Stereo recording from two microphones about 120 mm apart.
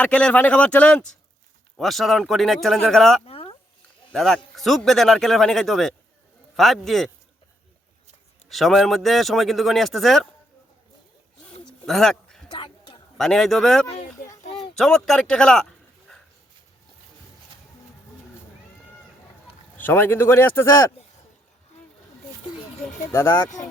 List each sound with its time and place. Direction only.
0.0 s speech: 10° left (ahead or behind)
3.2 s a sound: 50° left (ahead or behind)
4.1 s speech: 5° left (ahead or behind)
8.4 s speech: centre (ahead or behind)
11.9 s speech: 5° left (ahead or behind)
12.5 s a sound: 40° left (ahead or behind)
13.1 s speech: 5° left (ahead or behind)
13.9 s a sound: 55° left (ahead or behind)
14.6 s speech: 5° left (ahead or behind)
19.7 s a man's voice: 15° left (ahead or behind)
23.1 s a man's voice: 20° left (ahead or behind)